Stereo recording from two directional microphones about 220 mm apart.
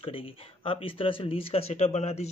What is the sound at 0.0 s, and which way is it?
Speech, 25° left (ahead or behind).